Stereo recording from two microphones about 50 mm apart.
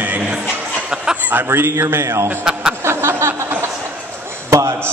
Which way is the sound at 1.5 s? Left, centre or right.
Right.